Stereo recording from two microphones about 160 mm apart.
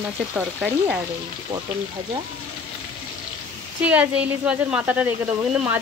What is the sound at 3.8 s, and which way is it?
Speech, 10° right (ahead or behind).